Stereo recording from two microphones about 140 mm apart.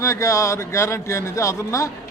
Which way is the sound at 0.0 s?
20° left (ahead or behind).